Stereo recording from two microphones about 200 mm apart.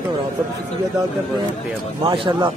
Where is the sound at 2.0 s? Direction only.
20° right (ahead or behind).